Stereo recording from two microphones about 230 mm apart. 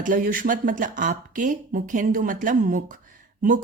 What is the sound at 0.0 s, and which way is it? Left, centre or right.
Speech, right.